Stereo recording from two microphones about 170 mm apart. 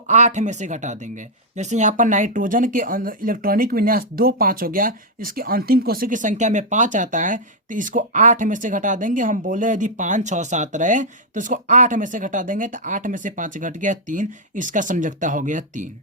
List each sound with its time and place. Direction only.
0.1 s speech: 45° right (ahead or behind)